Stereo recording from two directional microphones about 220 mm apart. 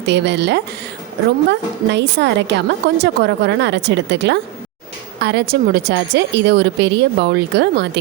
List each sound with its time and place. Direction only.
0.0 s a woman's voice: 50° right (ahead or behind)